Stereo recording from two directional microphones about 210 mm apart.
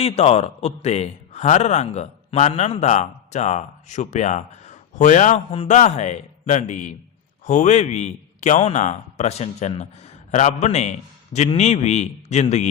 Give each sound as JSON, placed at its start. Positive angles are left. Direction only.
{"t": 0.0, "sound": "a man's voice", "side_deg": 30}